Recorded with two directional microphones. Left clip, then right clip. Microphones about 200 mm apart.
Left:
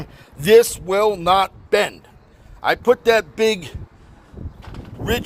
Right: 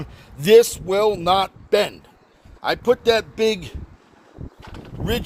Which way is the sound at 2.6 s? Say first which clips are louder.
Left 2 dB; centre (ahead or behind).